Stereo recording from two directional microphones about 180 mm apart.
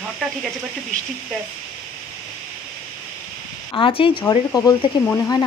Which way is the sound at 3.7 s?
30° left (ahead or behind).